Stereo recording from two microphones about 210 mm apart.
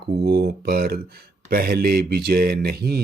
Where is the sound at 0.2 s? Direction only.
50° right (ahead or behind).